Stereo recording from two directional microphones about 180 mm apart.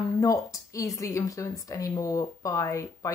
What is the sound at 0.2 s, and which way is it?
Speech, 20° left (ahead or behind).